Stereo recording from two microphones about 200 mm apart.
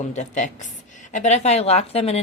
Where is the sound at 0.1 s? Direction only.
35° left (ahead or behind).